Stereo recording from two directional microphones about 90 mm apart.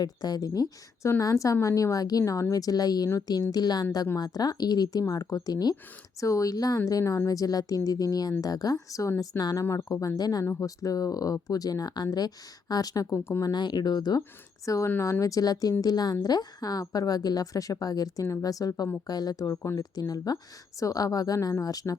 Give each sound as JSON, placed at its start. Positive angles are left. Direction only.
{"t": 0.0, "sound": "a woman's voice", "side_deg": 45}
{"t": 9.4, "sound": "a woman's voice", "side_deg": 45}
{"t": 10.4, "sound": "speech", "side_deg": 25}
{"t": 10.8, "sound": "a woman's voice", "side_deg": 40}
{"t": 13.1, "sound": "speech", "side_deg": 25}
{"t": 13.4, "sound": "a woman's voice", "side_deg": 55}
{"t": 14.2, "sound": "a woman's voice", "side_deg": 35}